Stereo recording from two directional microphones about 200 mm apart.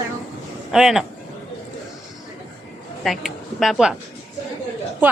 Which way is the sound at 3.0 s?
Centre (ahead or behind).